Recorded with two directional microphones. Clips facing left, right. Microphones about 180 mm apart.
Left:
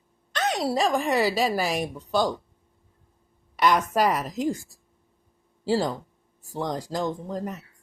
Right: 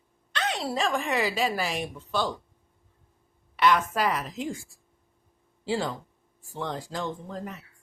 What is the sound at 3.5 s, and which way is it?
Speech, 40° left (ahead or behind).